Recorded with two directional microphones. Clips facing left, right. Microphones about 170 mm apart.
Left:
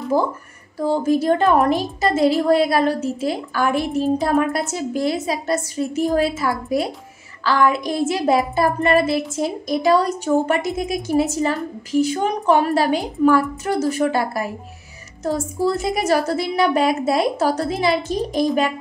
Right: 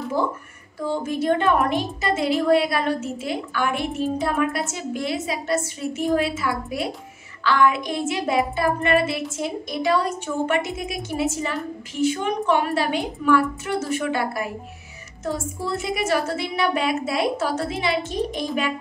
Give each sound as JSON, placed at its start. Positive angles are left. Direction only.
{"t": 0.7, "sound": "a woman's voice", "side_deg": 40}